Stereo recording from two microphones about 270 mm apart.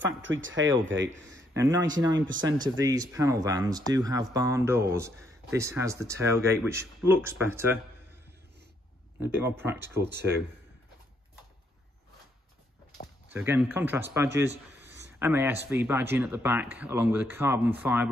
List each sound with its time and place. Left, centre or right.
0.0 s speech: right
1.3 s speech: centre
9.2 s speech: centre
13.3 s speech: centre